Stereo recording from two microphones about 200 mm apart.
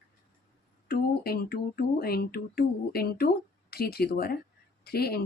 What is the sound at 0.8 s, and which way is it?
Speech, 50° left (ahead or behind).